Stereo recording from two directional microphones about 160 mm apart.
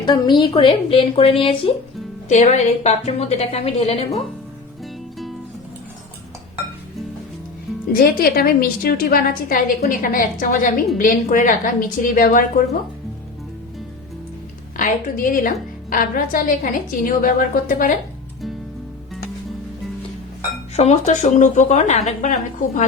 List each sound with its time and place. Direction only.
0.0 s a woman's voice: 30° left (ahead or behind)
2.3 s a woman's voice: 45° left (ahead or behind)
7.9 s a woman's voice: 70° left (ahead or behind)
14.8 s a woman's voice: 55° left (ahead or behind)
20.7 s a woman's voice: 45° left (ahead or behind)